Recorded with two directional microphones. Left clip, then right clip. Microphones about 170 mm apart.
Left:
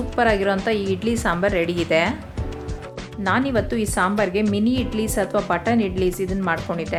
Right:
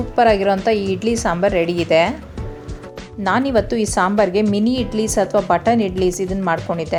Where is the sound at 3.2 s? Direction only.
15° right (ahead or behind).